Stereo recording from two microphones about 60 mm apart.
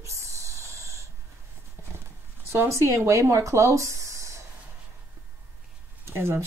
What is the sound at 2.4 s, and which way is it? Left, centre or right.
Speech, right.